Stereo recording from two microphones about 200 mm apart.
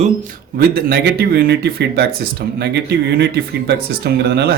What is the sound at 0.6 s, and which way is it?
Speech, 50° right (ahead or behind).